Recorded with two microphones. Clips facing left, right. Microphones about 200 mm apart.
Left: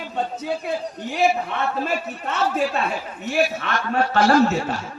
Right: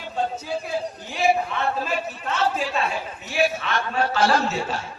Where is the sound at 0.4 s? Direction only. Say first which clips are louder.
Left 3 dB; 60° left (ahead or behind).